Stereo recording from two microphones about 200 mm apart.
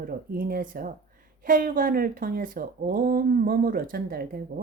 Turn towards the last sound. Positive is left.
turn(degrees=-45)  # may be behind; listen again after turning